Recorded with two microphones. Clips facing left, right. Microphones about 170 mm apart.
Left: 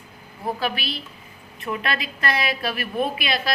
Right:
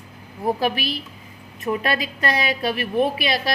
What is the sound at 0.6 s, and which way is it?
Speech, 40° right (ahead or behind).